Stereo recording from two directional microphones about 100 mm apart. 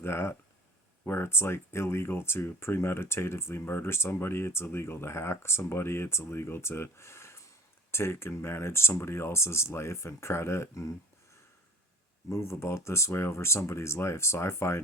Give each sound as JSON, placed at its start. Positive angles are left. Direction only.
{"t": 0.0, "sound": "speech", "side_deg": 25}
{"t": 12.3, "sound": "speech", "side_deg": 25}